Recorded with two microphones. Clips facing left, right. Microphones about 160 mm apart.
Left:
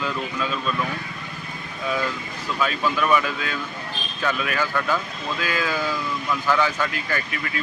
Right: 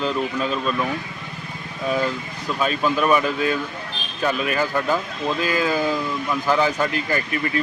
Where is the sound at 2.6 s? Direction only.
25° right (ahead or behind).